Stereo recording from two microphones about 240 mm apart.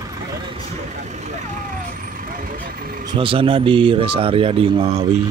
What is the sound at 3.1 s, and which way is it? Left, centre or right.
Speech, right.